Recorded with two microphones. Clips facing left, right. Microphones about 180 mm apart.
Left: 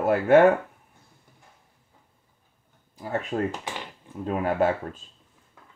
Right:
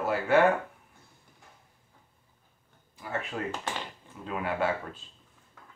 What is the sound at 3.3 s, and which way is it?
Speech, 35° left (ahead or behind).